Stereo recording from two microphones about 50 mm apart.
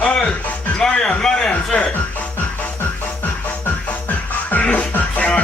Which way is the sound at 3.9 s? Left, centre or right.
Left.